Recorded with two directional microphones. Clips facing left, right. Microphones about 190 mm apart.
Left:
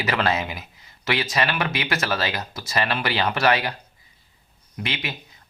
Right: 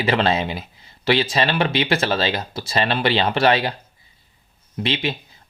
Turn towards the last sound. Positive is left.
turn(degrees=-30)  # may be behind; listen again after turning